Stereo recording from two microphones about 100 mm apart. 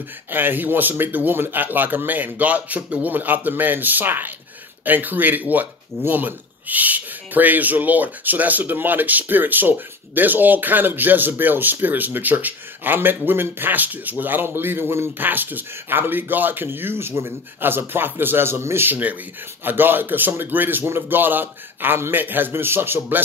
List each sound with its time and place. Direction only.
0.3 s speech: 20° right (ahead or behind)